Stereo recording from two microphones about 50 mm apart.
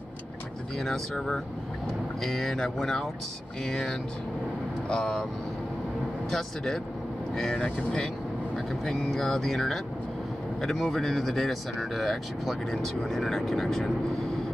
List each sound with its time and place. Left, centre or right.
0.7 s speech: centre
6.3 s speech: centre